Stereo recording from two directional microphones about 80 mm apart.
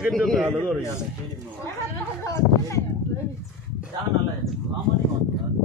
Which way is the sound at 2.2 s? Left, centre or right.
Left.